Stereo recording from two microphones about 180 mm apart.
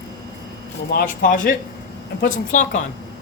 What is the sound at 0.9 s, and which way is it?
Speech, 50° left (ahead or behind).